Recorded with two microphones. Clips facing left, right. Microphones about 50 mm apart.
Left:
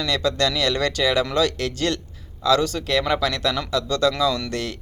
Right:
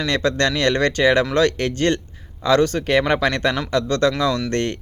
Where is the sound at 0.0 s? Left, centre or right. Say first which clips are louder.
Right 2 dB; right.